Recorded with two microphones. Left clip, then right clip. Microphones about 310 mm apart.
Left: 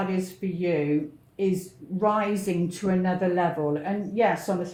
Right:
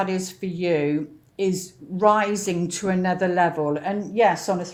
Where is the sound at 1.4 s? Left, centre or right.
Right.